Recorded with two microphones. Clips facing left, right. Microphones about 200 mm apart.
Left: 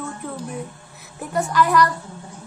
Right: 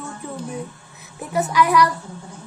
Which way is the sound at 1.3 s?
5° right (ahead or behind).